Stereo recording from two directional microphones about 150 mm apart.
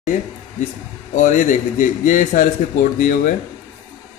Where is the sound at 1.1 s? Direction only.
55° left (ahead or behind).